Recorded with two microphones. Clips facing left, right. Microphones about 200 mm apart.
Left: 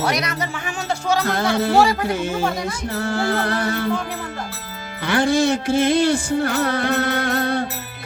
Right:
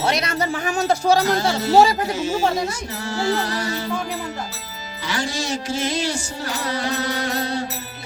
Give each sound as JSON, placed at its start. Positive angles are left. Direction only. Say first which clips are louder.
{"t": 0.0, "sound": "speech", "louder": "right 1 dB", "side_deg": -25}
{"t": 1.2, "sound": "music", "louder": "even", "side_deg": 55}
{"t": 5.0, "sound": "music", "louder": "left 9 dB", "side_deg": 55}